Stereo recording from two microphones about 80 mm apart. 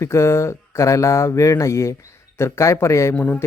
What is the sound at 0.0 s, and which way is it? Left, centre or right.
Speech, left.